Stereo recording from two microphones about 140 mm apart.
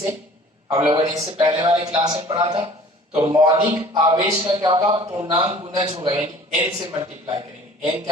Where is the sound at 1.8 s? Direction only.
30° right (ahead or behind).